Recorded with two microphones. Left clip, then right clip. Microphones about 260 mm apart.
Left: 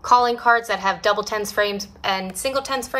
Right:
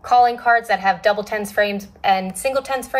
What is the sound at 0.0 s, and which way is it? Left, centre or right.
A woman's voice, centre.